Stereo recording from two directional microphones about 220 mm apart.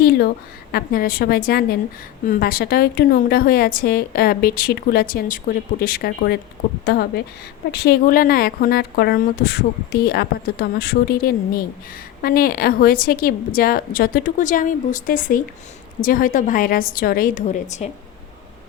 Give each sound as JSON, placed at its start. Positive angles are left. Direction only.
{"t": 0.7, "sound": "a woman's voice", "side_deg": 45}